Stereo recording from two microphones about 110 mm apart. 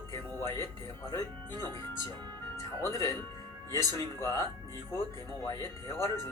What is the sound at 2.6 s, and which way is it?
Speech, 30° left (ahead or behind).